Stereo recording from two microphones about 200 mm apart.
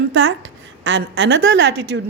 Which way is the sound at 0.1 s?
70° right (ahead or behind).